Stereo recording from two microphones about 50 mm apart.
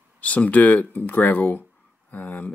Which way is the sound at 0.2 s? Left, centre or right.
Left.